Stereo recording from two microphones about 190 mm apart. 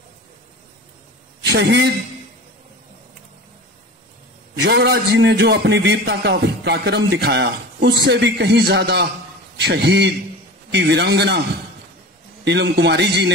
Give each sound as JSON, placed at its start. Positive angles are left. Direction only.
{"t": 1.4, "sound": "a man's voice", "side_deg": -65}
{"t": 4.6, "sound": "a man's voice", "side_deg": -60}
{"t": 12.4, "sound": "a man's voice", "side_deg": -65}